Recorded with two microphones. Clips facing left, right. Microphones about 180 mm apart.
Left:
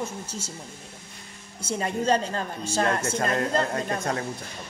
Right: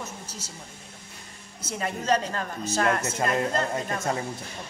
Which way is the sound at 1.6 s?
30° left (ahead or behind).